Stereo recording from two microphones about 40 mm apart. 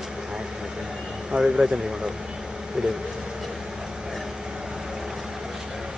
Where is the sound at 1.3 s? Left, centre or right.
Right.